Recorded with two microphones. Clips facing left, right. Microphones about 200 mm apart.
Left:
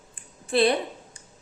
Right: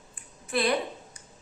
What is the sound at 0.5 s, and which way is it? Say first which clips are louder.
Speech: left 7 dB; 30° left (ahead or behind).